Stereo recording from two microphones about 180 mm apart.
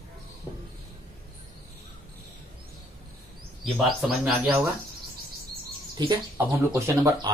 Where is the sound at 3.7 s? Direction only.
5° right (ahead or behind).